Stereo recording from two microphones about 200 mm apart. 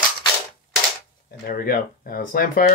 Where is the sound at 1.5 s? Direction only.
45° left (ahead or behind).